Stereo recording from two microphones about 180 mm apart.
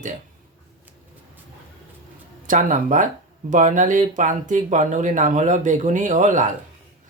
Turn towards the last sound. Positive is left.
turn(degrees=-45)  # may be behind; listen again after turning